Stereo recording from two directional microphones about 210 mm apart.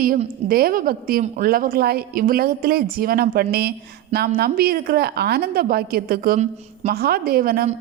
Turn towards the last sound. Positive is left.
turn(degrees=-45)  # may be behind; listen again after turning